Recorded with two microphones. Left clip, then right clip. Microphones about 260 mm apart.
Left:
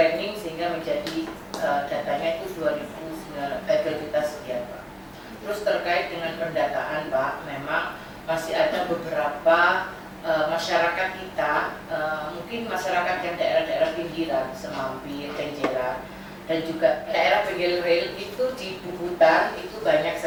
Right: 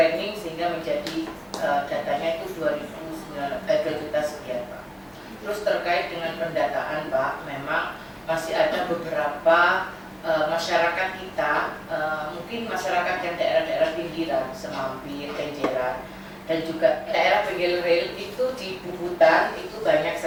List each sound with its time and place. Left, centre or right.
0.0 s a sound: centre
1.5 s speech: centre
5.5 s speech: centre